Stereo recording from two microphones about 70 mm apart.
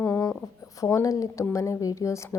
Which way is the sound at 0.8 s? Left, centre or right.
Left.